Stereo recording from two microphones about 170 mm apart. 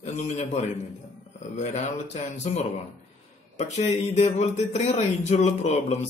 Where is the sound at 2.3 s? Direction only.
40° left (ahead or behind).